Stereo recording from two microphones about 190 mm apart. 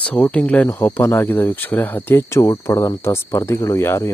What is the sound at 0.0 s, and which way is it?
Speech, 5° left (ahead or behind).